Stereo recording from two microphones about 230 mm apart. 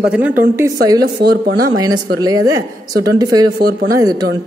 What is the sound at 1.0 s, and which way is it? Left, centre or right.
Speech, right.